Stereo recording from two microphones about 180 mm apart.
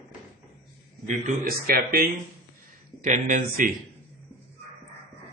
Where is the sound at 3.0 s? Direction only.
45° right (ahead or behind).